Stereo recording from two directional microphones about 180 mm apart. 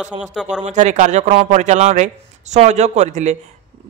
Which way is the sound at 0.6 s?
40° right (ahead or behind).